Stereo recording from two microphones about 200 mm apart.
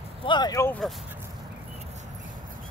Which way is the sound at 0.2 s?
20° left (ahead or behind).